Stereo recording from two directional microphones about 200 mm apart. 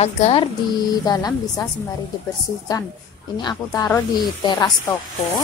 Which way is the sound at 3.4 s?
20° left (ahead or behind).